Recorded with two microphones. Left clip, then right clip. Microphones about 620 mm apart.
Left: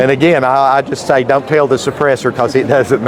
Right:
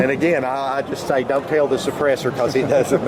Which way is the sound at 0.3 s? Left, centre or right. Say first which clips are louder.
Left 11 dB; left.